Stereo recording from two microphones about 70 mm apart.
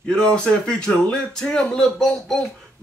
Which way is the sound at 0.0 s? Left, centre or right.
Centre.